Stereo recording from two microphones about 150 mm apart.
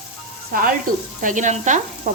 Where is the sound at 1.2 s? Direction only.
60° right (ahead or behind).